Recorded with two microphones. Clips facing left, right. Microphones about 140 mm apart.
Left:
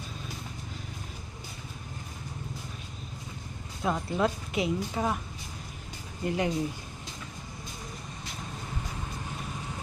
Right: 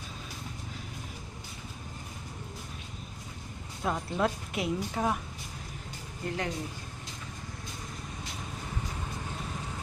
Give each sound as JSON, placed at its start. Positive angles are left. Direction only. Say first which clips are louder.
{"t": 3.8, "sound": "speech", "louder": "left 2 dB", "side_deg": 0}
{"t": 6.2, "sound": "speech", "louder": "left 5 dB", "side_deg": 15}